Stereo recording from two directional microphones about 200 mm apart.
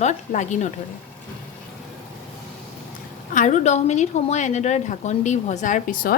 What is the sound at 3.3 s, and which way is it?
A woman's voice, 40° left (ahead or behind).